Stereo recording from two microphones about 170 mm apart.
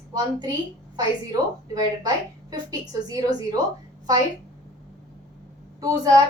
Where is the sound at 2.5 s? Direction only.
20° right (ahead or behind).